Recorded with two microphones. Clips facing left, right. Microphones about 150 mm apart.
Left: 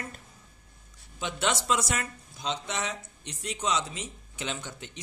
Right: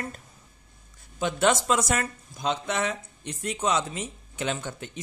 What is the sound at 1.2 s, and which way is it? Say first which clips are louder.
Speech: right 7 dB; 50° right (ahead or behind).